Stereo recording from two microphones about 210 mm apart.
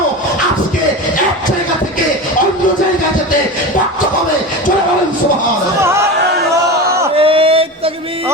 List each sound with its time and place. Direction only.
7.2 s mantra: 25° right (ahead or behind)